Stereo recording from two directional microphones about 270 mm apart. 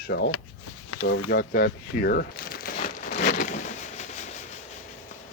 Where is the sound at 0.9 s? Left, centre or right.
Left.